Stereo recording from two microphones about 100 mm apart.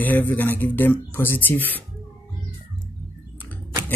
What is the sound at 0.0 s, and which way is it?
Speech, 15° left (ahead or behind).